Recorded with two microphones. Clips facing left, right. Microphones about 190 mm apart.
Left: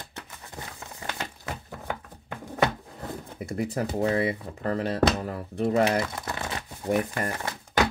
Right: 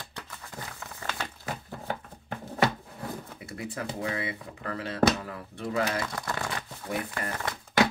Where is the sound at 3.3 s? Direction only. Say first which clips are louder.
Left 7 dB; 40° left (ahead or behind).